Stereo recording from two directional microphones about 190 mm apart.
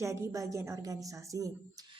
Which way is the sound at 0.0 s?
15° right (ahead or behind).